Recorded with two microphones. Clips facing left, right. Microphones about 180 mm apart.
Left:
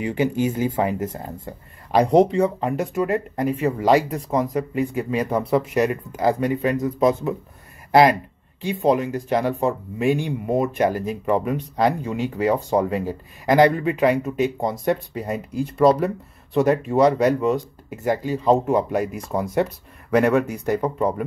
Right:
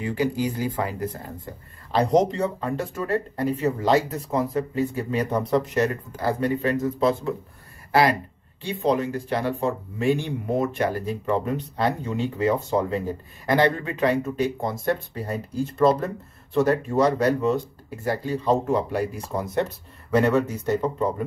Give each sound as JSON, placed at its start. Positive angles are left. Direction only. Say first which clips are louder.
{"t": 0.0, "sound": "speech", "louder": "left 3 dB", "side_deg": 20}
{"t": 7.9, "sound": "a sound", "louder": "left 5 dB", "side_deg": 20}
{"t": 8.8, "sound": "speech", "louder": "left 3 dB", "side_deg": 15}